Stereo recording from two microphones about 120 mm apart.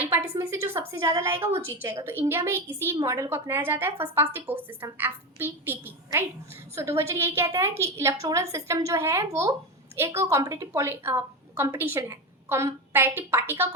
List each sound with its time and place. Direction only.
0.1 s a woman's voice: 20° right (ahead or behind)